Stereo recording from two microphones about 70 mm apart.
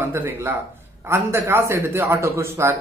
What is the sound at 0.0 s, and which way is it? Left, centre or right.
A man's voice, right.